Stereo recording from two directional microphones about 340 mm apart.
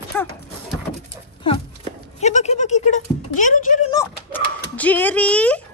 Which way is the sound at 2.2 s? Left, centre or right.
Centre.